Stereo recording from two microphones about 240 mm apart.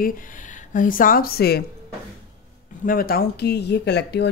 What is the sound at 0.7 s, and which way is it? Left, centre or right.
Speech, left.